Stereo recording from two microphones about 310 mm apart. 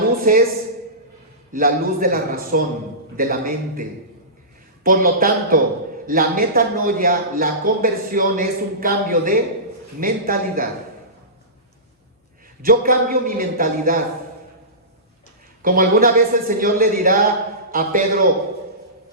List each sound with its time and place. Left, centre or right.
0.2 s a woman's voice: right
1.5 s speech: right
12.6 s speech: right
15.6 s speech: right